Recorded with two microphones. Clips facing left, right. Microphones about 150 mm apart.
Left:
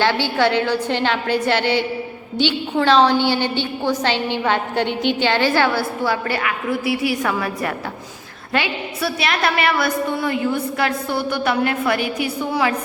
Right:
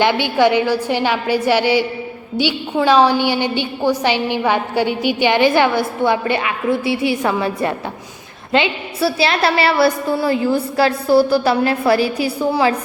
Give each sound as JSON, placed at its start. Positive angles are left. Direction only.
{"t": 0.0, "sound": "a woman's voice", "side_deg": -15}